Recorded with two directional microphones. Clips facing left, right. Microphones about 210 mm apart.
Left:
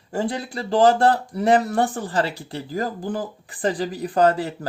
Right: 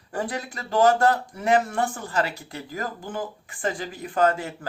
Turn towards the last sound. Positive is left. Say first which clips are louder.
# left 4 dB
turn(degrees=35)  # may be behind; listen again after turning